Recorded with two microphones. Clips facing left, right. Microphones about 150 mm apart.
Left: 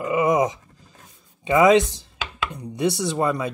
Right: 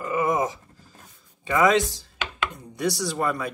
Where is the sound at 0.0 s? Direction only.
20° left (ahead or behind).